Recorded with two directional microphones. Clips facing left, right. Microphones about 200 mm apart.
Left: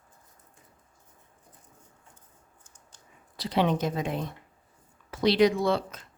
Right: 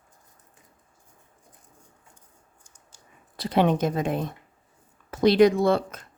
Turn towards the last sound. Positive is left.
turn(degrees=-50)  # may be behind; listen again after turning